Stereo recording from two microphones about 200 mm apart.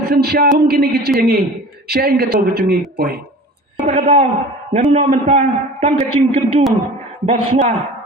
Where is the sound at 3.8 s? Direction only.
40° right (ahead or behind).